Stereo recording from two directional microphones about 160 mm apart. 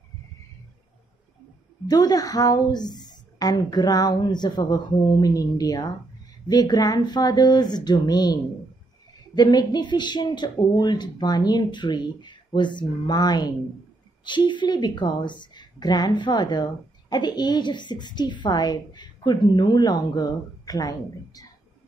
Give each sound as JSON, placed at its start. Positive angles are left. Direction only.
{"t": 1.9, "sound": "speech", "side_deg": 25}